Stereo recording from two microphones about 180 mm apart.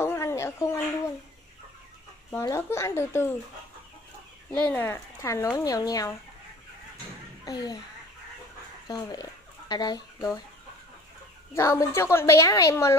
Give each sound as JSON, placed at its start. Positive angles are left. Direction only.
{"t": 0.0, "sound": "a sound", "side_deg": 15}
{"t": 2.4, "sound": "speech", "side_deg": 15}
{"t": 4.5, "sound": "speech", "side_deg": 10}
{"t": 7.4, "sound": "a child's voice", "side_deg": 20}
{"t": 8.8, "sound": "speech", "side_deg": 20}
{"t": 11.5, "sound": "speech", "side_deg": 15}